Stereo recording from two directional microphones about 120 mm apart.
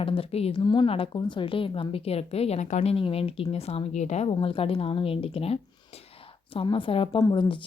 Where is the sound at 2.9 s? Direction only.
50° left (ahead or behind); by 4.3 s 70° left (ahead or behind).